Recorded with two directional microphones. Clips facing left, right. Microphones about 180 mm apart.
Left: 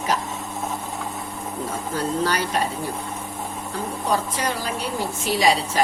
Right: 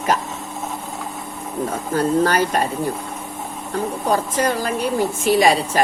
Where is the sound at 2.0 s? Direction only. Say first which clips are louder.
Right 7 dB; 50° right (ahead or behind).